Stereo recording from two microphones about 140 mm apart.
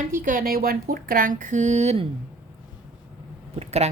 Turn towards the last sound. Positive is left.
turn(degrees=-50)  # may be behind; listen again after turning